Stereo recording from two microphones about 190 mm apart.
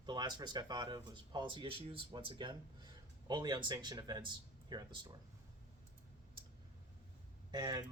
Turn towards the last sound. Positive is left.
turn(degrees=-20)  # may be behind; listen again after turning